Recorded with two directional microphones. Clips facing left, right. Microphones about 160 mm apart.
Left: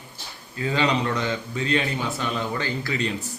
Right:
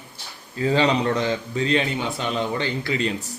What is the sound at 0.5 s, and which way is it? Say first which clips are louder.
A man's voice: right 3 dB; 35° right (ahead or behind).